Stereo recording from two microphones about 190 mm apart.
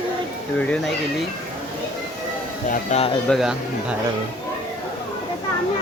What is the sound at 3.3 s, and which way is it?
Speech, centre (ahead or behind).